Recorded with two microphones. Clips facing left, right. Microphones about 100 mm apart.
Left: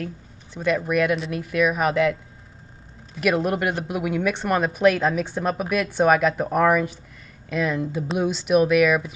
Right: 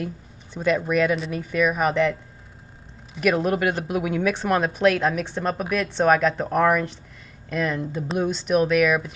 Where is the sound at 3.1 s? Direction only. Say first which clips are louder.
Right 1 dB; 5° left (ahead or behind).